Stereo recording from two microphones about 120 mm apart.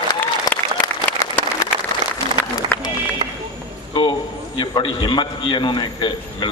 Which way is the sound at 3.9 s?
40° left (ahead or behind).